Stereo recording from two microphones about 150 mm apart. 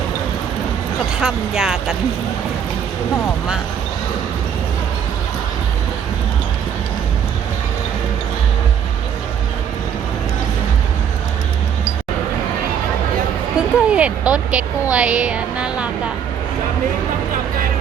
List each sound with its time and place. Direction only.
1.2 s speech: 5° right (ahead or behind)
13.6 s a sound: 5° right (ahead or behind)
14.9 s speech: 5° right (ahead or behind)